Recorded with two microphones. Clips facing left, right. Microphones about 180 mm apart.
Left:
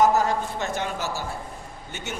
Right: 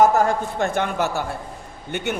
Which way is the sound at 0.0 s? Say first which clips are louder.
Right 3 dB; 50° right (ahead or behind).